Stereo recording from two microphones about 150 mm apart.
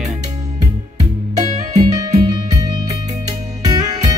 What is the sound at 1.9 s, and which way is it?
Music, 25° right (ahead or behind).